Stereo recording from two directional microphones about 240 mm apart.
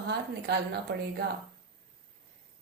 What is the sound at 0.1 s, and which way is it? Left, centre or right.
Speech, right.